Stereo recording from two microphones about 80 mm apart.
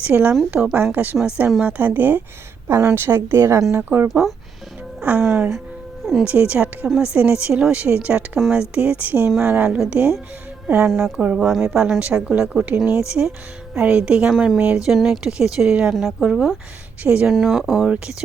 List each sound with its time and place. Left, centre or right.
0.0 s a woman's voice: centre
4.1 s speech: centre
5.0 s a woman's voice: right
11.2 s speech: centre
14.3 s speech: centre
17.0 s a woman's voice: centre
17.2 s speech: centre